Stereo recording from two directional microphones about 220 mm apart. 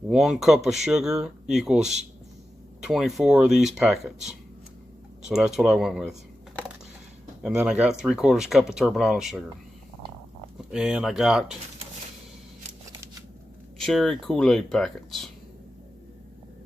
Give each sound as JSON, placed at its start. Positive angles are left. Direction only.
{"t": 0.1, "sound": "speech", "side_deg": 0}
{"t": 7.4, "sound": "speech", "side_deg": -5}
{"t": 10.6, "sound": "speech", "side_deg": -5}
{"t": 13.7, "sound": "speech", "side_deg": 0}